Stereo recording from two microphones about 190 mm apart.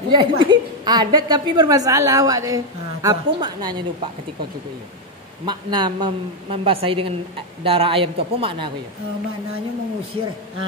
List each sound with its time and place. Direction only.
0.1 s a woman's voice: 25° right (ahead or behind)
5.4 s a woman's voice: 25° right (ahead or behind)